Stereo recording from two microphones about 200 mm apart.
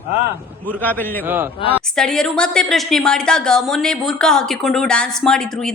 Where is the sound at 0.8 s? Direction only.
10° left (ahead or behind).